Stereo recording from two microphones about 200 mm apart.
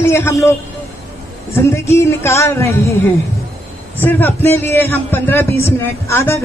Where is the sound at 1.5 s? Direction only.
15° left (ahead or behind).